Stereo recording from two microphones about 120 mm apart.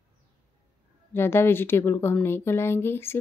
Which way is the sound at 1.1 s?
20° left (ahead or behind).